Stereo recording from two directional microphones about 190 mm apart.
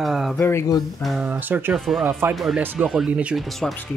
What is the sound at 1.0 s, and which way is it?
Speech, centre (ahead or behind).